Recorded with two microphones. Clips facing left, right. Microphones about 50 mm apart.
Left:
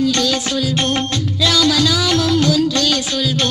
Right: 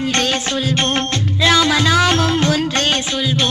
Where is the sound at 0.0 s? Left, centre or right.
Right.